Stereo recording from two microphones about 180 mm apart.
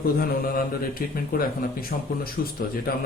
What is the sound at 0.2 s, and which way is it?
A man's voice, 55° left (ahead or behind).